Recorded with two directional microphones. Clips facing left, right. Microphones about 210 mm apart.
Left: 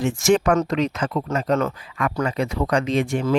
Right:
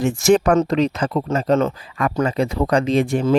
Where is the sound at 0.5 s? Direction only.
30° right (ahead or behind).